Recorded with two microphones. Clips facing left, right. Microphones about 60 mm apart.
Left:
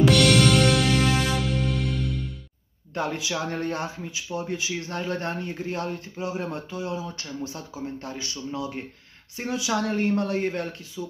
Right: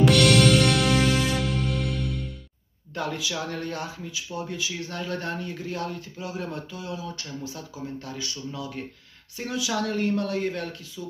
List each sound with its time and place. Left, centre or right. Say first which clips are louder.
0.0 s music: even; centre
2.9 s speech: left 2 dB; left